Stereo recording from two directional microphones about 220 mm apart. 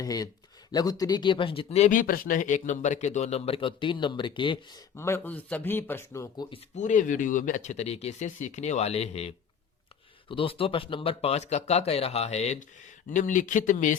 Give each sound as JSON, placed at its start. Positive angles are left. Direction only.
{"t": 0.0, "sound": "speech", "side_deg": 15}
{"t": 6.7, "sound": "speech", "side_deg": 35}